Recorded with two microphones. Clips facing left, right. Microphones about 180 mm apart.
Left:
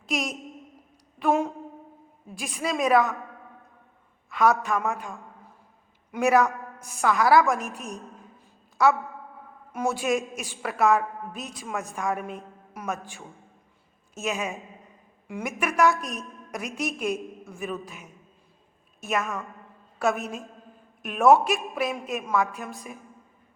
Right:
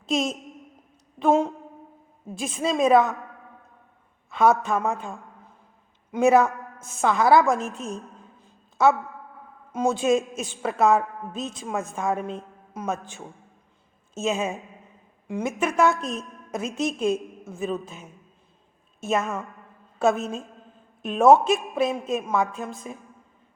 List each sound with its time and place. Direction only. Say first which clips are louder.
0.0 s a woman's voice: right 5 dB; 25° right (ahead or behind)
4.3 s a man's voice: right 2 dB; 25° right (ahead or behind)
8.8 s a woman's voice: right 2 dB; 25° right (ahead or behind)
21.0 s a woman's voice: right 2 dB; 20° right (ahead or behind)